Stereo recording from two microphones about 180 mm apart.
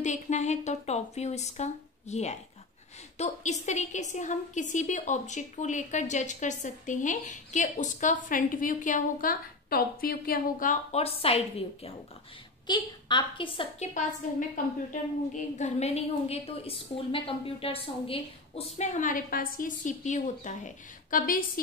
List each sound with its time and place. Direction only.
0.0 s a woman's voice: 40° left (ahead or behind)
14.9 s a woman's voice: 40° left (ahead or behind)